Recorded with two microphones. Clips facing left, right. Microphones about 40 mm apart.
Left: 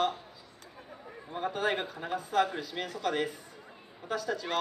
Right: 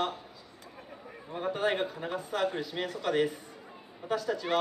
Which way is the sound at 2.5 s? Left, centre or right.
Right.